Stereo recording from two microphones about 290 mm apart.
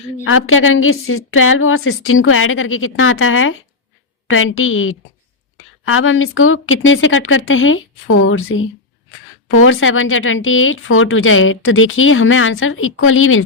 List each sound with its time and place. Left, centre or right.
0.3 s speech: left